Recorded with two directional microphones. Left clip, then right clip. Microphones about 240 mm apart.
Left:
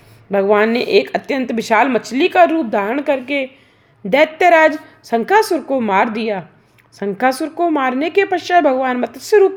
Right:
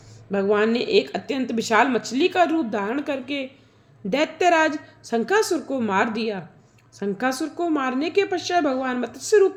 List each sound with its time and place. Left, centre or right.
0.3 s speech: left